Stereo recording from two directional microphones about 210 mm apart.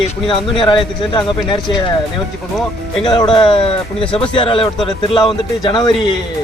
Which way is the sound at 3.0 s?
20° left (ahead or behind).